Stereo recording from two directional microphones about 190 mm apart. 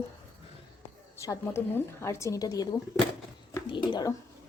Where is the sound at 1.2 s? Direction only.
15° left (ahead or behind).